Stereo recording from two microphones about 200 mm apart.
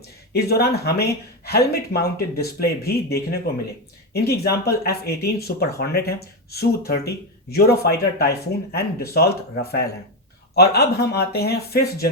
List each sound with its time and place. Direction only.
0.3 s speech: 50° left (ahead or behind)